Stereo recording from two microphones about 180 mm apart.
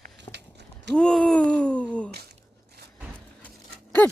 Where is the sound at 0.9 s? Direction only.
5° left (ahead or behind).